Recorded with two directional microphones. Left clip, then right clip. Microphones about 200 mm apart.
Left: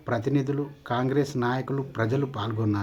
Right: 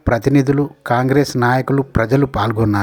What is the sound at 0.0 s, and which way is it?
Speech, 40° right (ahead or behind).